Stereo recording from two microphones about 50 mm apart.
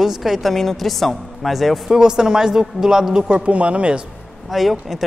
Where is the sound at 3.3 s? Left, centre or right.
Right.